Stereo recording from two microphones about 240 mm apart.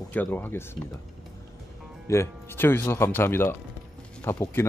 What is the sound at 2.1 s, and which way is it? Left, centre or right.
Speech, centre.